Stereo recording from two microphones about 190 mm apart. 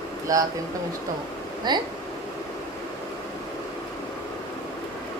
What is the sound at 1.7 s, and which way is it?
Speech, 20° right (ahead or behind).